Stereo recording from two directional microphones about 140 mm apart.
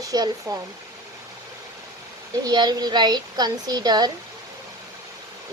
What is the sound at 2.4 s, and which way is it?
A child's voice, 30° right (ahead or behind).